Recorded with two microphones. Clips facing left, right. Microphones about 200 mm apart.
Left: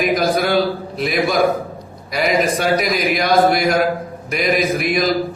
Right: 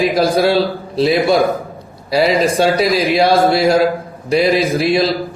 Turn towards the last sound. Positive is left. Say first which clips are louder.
# right 3 dB
turn(degrees=-30)  # may be behind; listen again after turning